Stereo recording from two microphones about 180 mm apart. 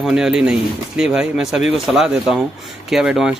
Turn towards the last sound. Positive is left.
turn(degrees=-5)  # may be behind; listen again after turning